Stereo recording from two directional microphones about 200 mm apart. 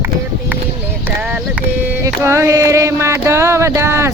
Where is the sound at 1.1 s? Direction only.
10° right (ahead or behind).